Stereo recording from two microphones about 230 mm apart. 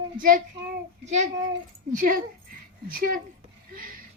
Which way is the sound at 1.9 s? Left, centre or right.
Right.